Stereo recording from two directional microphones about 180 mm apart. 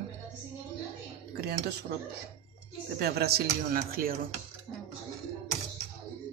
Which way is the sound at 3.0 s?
60° right (ahead or behind).